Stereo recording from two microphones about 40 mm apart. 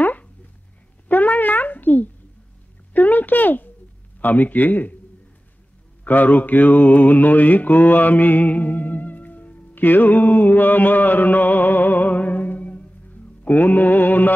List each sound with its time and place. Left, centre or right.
0.0 s a sound: left
4.2 s music: left
6.0 s mantra: left
13.4 s music: left